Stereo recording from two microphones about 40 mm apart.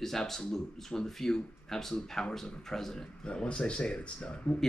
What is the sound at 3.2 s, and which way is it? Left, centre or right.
Speech, left.